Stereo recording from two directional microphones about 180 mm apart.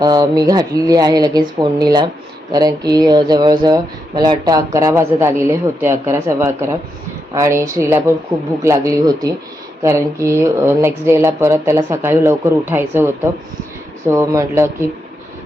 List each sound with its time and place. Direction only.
0.0 s speech: 20° right (ahead or behind)